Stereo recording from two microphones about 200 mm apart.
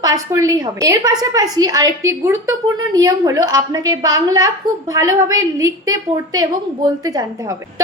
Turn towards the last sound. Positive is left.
turn(degrees=-20)  # may be behind; listen again after turning